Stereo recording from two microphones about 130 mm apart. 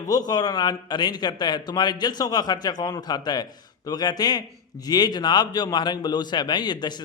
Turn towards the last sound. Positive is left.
turn(degrees=35)  # may be behind; listen again after turning